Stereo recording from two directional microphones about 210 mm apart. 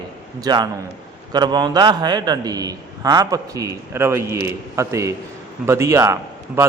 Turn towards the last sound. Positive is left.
turn(degrees=-15)  # may be behind; listen again after turning